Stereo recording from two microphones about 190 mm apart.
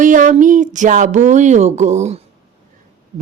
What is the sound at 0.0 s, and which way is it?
Speech, 45° right (ahead or behind).